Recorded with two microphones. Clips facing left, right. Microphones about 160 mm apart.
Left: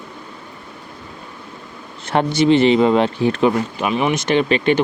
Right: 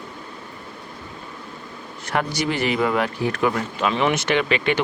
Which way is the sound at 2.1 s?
25° left (ahead or behind).